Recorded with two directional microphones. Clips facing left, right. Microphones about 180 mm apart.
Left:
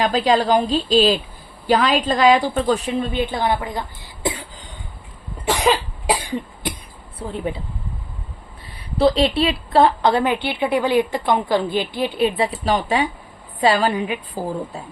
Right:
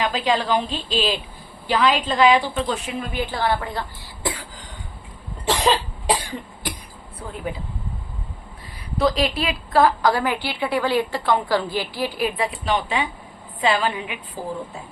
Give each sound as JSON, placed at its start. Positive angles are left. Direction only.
{"t": 0.0, "sound": "a woman's voice", "side_deg": 40}
{"t": 5.5, "sound": "cough", "side_deg": 10}
{"t": 6.3, "sound": "cough", "side_deg": 25}
{"t": 7.2, "sound": "a woman's voice", "side_deg": 30}
{"t": 9.0, "sound": "a woman's voice", "side_deg": 30}